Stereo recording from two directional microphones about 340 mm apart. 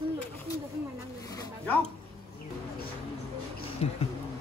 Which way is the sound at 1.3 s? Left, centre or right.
Centre.